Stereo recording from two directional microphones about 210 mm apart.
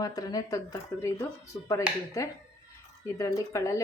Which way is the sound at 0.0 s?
15° left (ahead or behind).